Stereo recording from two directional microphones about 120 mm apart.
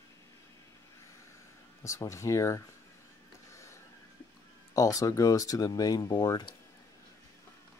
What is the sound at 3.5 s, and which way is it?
Printer, 25° left (ahead or behind).